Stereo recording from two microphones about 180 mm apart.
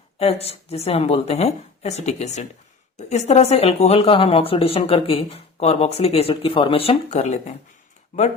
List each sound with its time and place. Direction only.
0.2 s speech: 35° left (ahead or behind)